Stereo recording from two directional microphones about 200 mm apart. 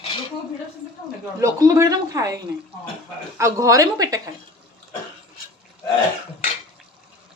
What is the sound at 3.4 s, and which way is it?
Speech, 15° right (ahead or behind).